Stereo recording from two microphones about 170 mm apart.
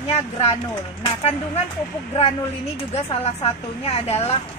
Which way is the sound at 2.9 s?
40° left (ahead or behind).